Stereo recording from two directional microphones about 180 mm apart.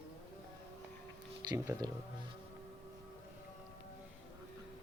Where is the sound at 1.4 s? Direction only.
15° right (ahead or behind).